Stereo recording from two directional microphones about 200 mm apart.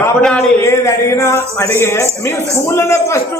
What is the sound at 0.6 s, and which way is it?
Speech, 15° left (ahead or behind).